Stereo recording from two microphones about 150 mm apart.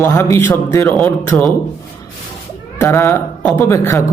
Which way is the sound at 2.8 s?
15° left (ahead or behind).